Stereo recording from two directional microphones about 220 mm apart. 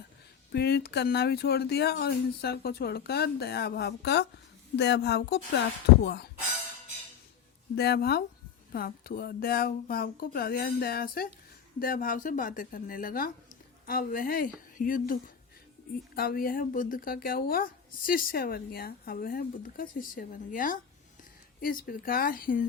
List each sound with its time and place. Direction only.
0.5 s speech: 45° left (ahead or behind)
7.8 s speech: 45° left (ahead or behind)